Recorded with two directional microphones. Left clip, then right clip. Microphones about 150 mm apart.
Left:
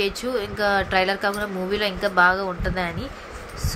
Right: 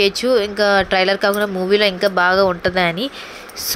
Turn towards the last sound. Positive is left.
turn(degrees=-50)  # may be behind; listen again after turning